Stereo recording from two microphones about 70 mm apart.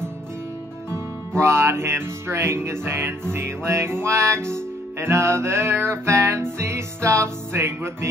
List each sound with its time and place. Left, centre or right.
1.4 s music: right